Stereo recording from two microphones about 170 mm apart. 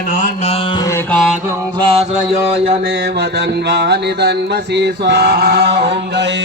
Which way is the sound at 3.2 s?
80° right.